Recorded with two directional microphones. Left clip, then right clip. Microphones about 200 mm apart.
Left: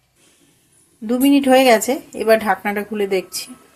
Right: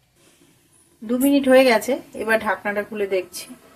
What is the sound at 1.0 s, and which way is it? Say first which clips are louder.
Speech: left 3 dB; 30° left (ahead or behind).